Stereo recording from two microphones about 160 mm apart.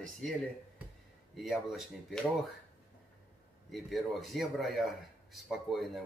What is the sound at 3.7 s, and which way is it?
Speech, centre (ahead or behind).